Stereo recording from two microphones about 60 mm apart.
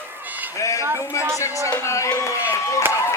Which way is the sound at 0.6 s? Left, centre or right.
Left.